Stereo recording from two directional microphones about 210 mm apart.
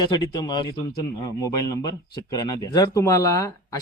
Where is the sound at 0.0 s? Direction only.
20° left (ahead or behind).